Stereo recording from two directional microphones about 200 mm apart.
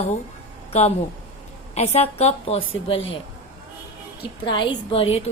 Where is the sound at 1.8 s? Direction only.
30° left (ahead or behind).